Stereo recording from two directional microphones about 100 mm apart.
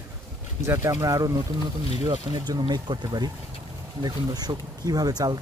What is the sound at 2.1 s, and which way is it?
Speech, 45° right (ahead or behind).